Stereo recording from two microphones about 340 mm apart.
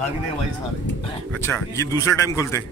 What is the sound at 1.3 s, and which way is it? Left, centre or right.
Speech, centre.